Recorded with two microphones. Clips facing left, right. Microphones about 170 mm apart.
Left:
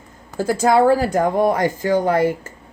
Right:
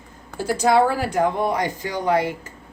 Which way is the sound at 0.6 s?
40° left (ahead or behind).